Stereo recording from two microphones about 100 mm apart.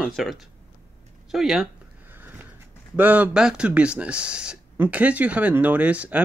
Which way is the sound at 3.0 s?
15° right (ahead or behind).